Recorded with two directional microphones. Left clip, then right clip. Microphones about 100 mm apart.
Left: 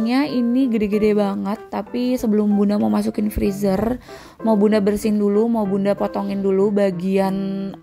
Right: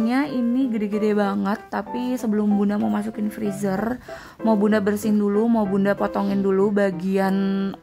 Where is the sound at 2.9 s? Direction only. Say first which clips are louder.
Left 5 dB; 40° left (ahead or behind).